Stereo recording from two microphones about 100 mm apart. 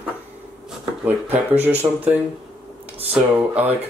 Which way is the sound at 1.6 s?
15° right (ahead or behind).